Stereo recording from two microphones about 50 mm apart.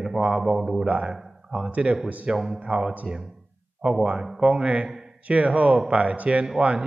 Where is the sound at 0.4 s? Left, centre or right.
Centre.